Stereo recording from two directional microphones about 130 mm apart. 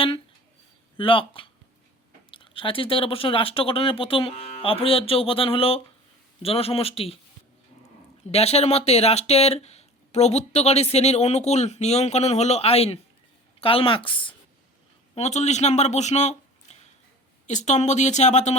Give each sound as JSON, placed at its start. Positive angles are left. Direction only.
{"t": 0.9, "sound": "speech", "side_deg": 45}
{"t": 8.3, "sound": "speech", "side_deg": 55}
{"t": 15.1, "sound": "speech", "side_deg": 60}